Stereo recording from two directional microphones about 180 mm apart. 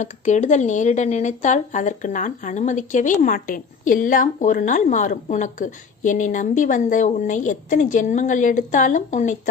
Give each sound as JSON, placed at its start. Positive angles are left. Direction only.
{"t": 0.0, "sound": "speech", "side_deg": 40}